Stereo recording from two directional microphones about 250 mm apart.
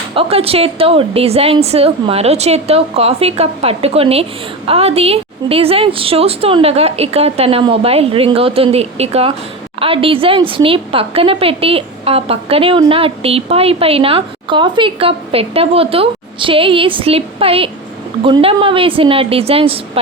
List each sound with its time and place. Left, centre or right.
0.1 s a woman's voice: right